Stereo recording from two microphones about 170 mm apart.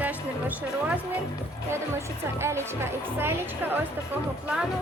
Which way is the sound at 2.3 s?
15° right (ahead or behind).